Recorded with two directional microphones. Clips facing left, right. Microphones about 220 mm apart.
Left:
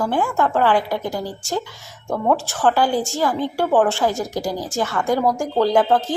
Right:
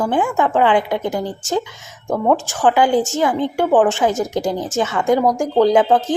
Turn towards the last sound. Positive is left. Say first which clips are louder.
# right 2 dB
turn(degrees=0)  # may be behind; listen again after turning